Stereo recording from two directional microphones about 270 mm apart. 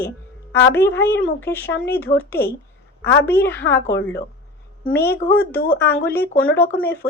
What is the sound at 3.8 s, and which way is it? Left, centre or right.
Speech, left.